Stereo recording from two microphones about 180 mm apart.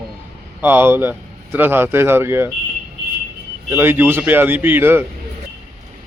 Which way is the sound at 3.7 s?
10° right (ahead or behind).